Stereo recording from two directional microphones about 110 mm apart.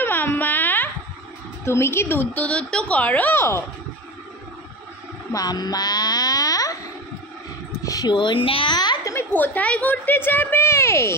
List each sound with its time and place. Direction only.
0.0 s music: 15° left (ahead or behind)
1.6 s a woman's voice: 25° left (ahead or behind)
5.3 s a woman's voice: 35° left (ahead or behind)
7.8 s speech: 35° left (ahead or behind)
8.5 s a woman's voice: 55° left (ahead or behind)
8.7 s a sound: 40° left (ahead or behind)
9.1 s a woman's voice: 15° left (ahead or behind)